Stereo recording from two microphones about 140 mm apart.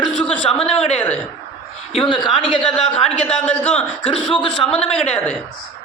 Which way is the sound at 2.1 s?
35° left (ahead or behind).